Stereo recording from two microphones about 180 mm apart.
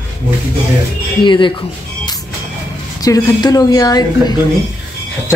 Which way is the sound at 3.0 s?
20° left (ahead or behind).